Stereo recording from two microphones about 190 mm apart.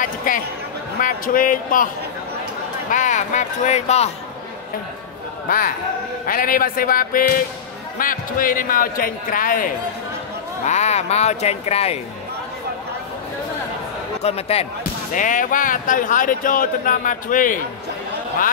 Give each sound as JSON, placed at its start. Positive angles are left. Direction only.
{"t": 0.0, "sound": "speech", "side_deg": 45}
{"t": 2.9, "sound": "speech", "side_deg": 40}
{"t": 6.2, "sound": "speech", "side_deg": 45}
{"t": 14.2, "sound": "speech", "side_deg": 30}
{"t": 14.8, "sound": "speech", "side_deg": 45}